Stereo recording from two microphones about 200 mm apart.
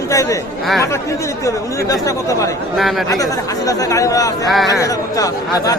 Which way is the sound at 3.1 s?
15° left (ahead or behind).